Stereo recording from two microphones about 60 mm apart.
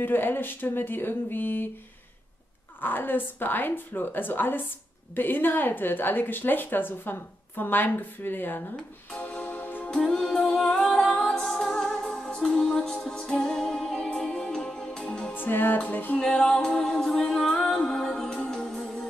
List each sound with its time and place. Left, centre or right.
0.0 s a woman's voice: left
2.8 s a woman's voice: left
9.2 s music: left
9.9 s music: centre
15.3 s music: left
16.2 s music: centre